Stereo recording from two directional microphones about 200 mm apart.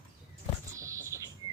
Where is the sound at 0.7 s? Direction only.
15° right (ahead or behind).